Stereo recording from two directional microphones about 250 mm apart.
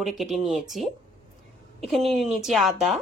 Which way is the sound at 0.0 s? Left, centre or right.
Centre.